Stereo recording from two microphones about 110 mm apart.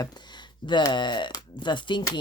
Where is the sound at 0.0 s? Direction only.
40° left (ahead or behind).